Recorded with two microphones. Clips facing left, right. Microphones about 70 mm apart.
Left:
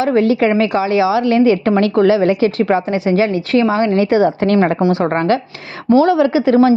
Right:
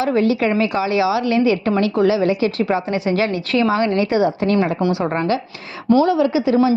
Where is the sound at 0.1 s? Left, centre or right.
Left.